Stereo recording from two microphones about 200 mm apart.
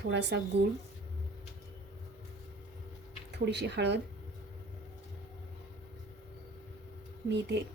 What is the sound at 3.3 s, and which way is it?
Speech, 60° right (ahead or behind).